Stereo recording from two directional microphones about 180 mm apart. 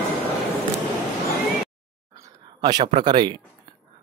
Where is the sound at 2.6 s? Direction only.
25° right (ahead or behind).